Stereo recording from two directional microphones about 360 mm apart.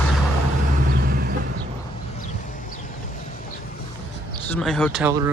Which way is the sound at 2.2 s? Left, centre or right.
Left.